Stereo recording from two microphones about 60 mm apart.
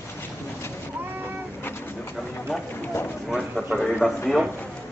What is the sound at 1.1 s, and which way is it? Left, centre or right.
Vehicle, right.